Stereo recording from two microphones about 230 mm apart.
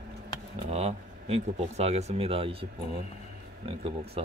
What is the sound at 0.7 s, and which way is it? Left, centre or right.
Speech, right.